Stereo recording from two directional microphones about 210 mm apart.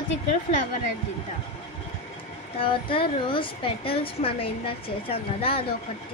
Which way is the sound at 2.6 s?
25° left (ahead or behind).